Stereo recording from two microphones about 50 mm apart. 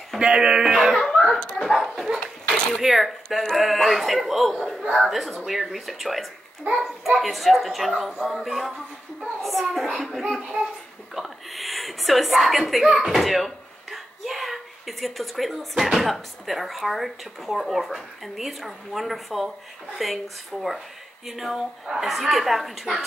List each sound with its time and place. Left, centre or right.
0.2 s speech: centre
0.9 s a sound: centre
1.6 s speech: centre
6.7 s a child's voice: right
7.1 s speech: centre